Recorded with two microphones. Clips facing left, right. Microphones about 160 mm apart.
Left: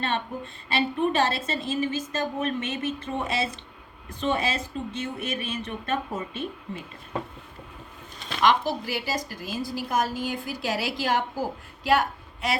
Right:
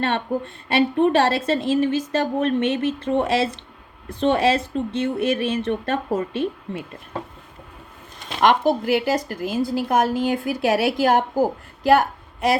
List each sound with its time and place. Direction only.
0.0 s a woman's voice: 60° right (ahead or behind)
8.4 s a woman's voice: 55° right (ahead or behind)